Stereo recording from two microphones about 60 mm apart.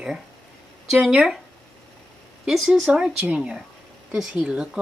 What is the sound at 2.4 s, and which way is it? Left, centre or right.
Speech, centre.